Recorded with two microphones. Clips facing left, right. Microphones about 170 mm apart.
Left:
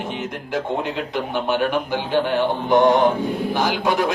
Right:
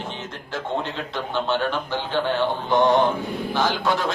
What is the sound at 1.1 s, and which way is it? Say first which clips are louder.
A man's voice: left 1 dB; 15° left (ahead or behind).